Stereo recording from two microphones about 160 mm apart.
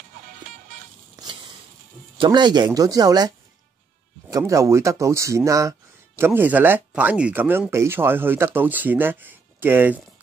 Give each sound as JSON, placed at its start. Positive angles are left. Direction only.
{"t": 2.1, "sound": "speech", "side_deg": -30}